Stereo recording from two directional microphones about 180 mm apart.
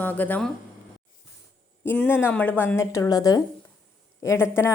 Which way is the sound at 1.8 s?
10° left (ahead or behind).